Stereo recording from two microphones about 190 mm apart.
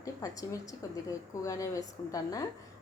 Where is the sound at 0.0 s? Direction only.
15° left (ahead or behind).